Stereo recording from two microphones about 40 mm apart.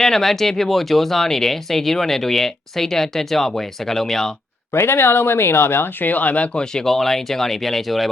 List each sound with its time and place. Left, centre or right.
0.0 s speech: centre
4.7 s speech: left
6.5 s speech: centre
6.8 s speech: centre